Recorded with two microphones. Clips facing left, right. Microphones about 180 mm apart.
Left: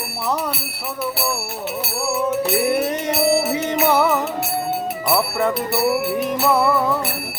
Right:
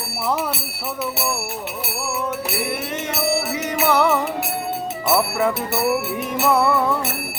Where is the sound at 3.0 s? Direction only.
35° left (ahead or behind).